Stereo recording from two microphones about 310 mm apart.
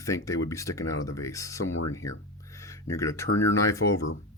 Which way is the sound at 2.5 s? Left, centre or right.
Centre.